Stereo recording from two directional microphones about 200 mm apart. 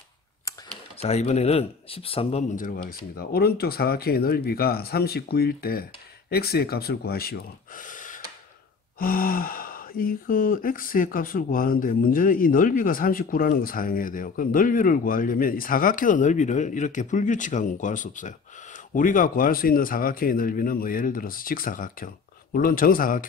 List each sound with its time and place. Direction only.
1.0 s speech: 35° left (ahead or behind)